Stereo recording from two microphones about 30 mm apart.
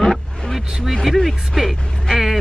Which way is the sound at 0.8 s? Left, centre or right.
Centre.